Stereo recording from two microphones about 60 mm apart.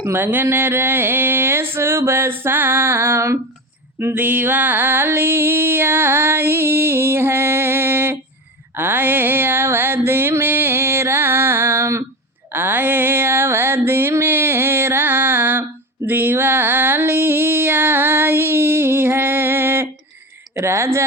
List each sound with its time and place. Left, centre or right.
0.0 s music: right
4.0 s music: right
8.7 s a sound: right